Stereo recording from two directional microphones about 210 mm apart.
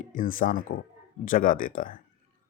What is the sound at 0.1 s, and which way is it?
Speech, 40° left (ahead or behind).